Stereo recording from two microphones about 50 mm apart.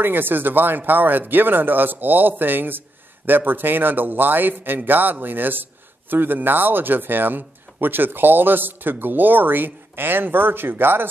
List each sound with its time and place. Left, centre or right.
0.0 s a man's voice: right